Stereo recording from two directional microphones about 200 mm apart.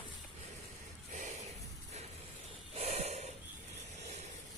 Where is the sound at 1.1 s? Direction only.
40° right (ahead or behind).